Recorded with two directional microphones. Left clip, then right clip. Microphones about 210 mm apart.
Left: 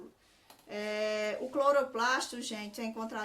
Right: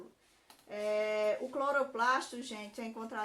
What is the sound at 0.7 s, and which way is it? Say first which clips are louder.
Speech: right 1 dB; 45° left (ahead or behind).